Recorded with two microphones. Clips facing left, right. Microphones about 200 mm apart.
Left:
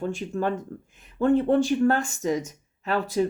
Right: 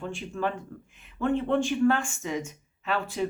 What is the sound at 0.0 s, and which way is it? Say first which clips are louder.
Speech: left 4 dB; 40° left (ahead or behind).